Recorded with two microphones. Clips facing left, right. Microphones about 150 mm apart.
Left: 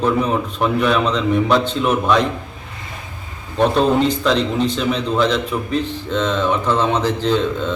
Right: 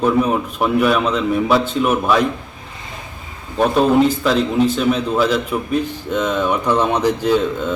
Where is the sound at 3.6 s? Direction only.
5° right (ahead or behind).